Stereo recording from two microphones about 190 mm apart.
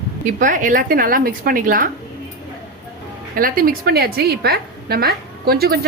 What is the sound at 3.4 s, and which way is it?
A woman's voice, 50° right (ahead or behind).